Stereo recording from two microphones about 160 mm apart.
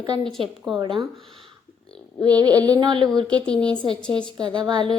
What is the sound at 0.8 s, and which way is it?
Speech, 30° right (ahead or behind).